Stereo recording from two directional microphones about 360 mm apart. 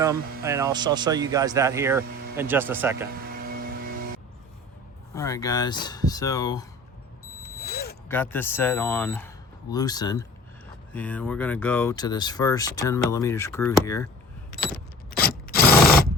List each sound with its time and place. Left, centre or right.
0.0 s speech: centre
3.1 s vehicle: right
5.1 s speech: centre
7.6 s a sound: left
8.0 s speech: centre
15.1 s a sound: left